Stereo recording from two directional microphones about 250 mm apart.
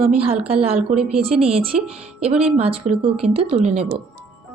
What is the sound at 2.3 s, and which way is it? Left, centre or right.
A woman's voice, right.